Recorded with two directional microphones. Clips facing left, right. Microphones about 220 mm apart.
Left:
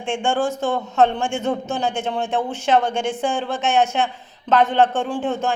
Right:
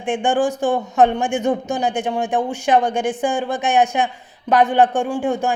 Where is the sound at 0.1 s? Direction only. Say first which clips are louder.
Right 3 dB; 15° right (ahead or behind).